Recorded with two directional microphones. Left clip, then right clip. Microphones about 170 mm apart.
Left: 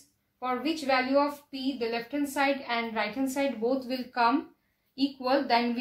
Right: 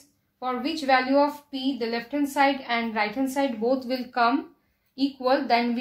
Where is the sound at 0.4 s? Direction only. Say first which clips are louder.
Right 2 dB; 20° right (ahead or behind).